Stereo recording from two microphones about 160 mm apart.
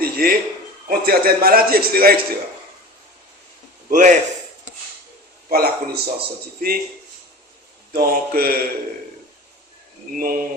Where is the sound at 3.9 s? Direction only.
55° right (ahead or behind).